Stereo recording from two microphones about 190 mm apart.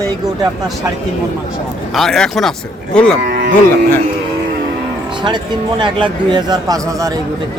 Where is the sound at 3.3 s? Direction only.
60° right (ahead or behind).